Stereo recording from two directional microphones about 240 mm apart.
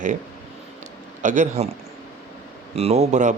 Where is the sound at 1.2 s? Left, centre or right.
Right.